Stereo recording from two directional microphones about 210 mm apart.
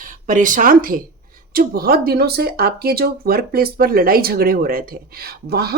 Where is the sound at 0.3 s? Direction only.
40° right (ahead or behind).